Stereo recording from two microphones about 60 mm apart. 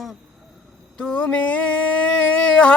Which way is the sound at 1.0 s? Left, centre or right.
Centre.